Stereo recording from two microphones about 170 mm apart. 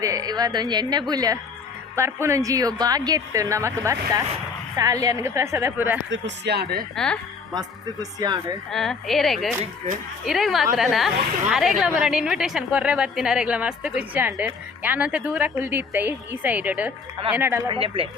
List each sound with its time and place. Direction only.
0.0 s a woman's voice: 20° right (ahead or behind)
6.1 s speech: 85° right; by 6.8 s 70° right (ahead or behind)
6.9 s speech: 5° left (ahead or behind)
7.5 s a woman's voice: 25° right (ahead or behind)
8.7 s a woman's voice: centre (ahead or behind)
17.7 s speech: 30° right (ahead or behind)